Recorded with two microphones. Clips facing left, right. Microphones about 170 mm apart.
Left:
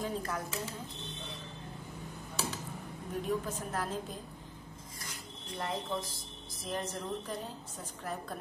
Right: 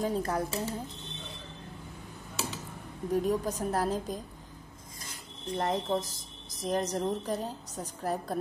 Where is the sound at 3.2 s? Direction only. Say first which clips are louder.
Right 5 dB; 40° right (ahead or behind).